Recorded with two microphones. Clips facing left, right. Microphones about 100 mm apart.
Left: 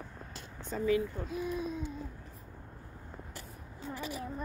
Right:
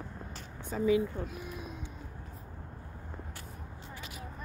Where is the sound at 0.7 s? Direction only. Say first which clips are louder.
Right 2 dB; 20° right (ahead or behind).